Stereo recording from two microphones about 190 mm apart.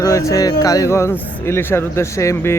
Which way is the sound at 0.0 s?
15° left (ahead or behind).